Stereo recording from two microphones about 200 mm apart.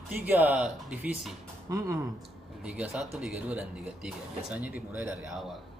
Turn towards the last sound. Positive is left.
turn(degrees=-5)  # may be behind; listen again after turning